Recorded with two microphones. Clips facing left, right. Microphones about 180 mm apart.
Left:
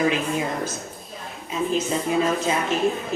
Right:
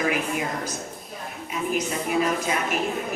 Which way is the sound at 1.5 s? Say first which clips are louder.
Left 3 dB; 25° left (ahead or behind).